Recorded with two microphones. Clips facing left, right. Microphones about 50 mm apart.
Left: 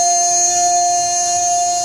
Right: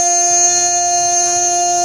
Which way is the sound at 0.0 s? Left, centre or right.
Right.